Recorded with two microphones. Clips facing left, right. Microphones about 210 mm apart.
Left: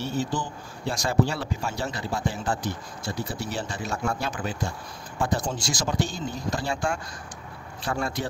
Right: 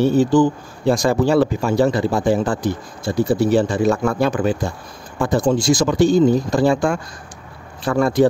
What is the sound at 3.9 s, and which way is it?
Speech, 90° right.